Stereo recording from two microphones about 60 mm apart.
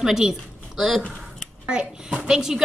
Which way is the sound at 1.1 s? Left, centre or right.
Centre.